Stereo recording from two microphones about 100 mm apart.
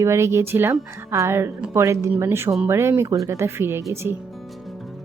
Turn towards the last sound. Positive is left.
turn(degrees=-25)  # may be behind; listen again after turning